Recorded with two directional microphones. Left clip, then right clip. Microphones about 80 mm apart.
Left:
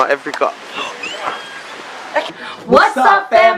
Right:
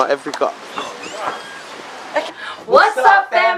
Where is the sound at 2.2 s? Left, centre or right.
Centre.